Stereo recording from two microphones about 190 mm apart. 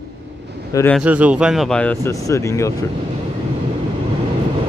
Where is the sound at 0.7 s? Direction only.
15° left (ahead or behind).